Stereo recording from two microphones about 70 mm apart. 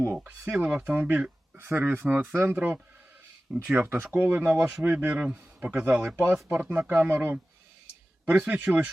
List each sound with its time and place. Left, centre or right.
0.5 s speech: centre
3.5 s speech: centre
3.8 s speech: right